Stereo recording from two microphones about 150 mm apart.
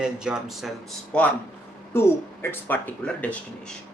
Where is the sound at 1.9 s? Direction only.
15° left (ahead or behind).